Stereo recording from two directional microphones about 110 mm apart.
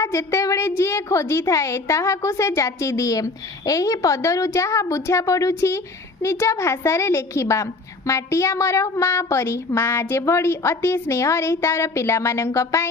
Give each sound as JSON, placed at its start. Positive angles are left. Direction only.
{"t": 0.0, "sound": "a woman's voice", "side_deg": 25}